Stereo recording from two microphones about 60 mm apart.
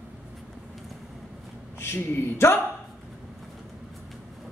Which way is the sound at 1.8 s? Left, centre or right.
Left.